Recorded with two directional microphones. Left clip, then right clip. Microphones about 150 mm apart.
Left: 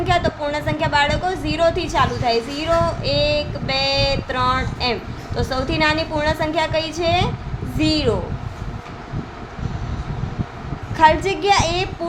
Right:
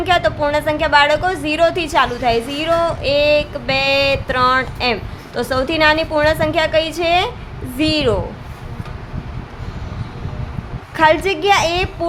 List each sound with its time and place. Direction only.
0.0 s a woman's voice: 15° right (ahead or behind)
10.9 s a woman's voice: 15° right (ahead or behind)